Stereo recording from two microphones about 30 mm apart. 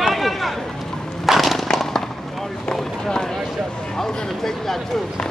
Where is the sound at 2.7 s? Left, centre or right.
Left.